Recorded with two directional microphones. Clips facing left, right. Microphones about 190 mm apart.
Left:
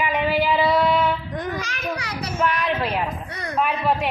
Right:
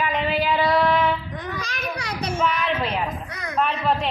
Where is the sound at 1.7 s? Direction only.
35° right (ahead or behind).